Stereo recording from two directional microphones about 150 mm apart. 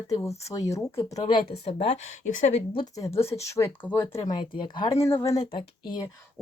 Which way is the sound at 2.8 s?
20° left (ahead or behind).